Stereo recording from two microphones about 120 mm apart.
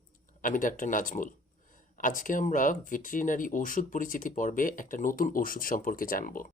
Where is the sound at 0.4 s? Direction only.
90° left.